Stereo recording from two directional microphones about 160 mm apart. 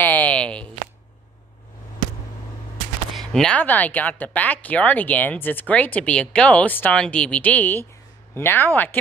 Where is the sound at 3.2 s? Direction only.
5° left (ahead or behind).